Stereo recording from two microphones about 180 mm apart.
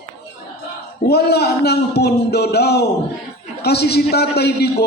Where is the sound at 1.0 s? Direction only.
65° left (ahead or behind).